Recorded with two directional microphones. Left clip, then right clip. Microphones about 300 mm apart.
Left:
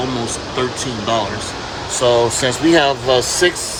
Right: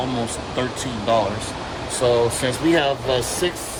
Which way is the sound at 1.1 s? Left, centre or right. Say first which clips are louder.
Even; centre.